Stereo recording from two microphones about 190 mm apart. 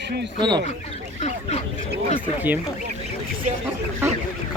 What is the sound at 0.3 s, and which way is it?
Speech, 25° right (ahead or behind).